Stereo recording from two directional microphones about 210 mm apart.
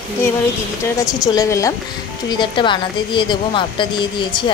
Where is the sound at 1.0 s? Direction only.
15° left (ahead or behind).